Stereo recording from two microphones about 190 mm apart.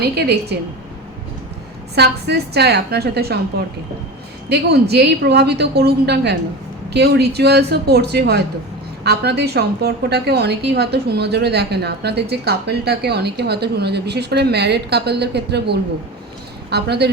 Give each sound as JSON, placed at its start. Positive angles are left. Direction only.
{"t": 0.0, "sound": "a woman's voice", "side_deg": -60}
{"t": 2.0, "sound": "a woman's voice", "side_deg": -60}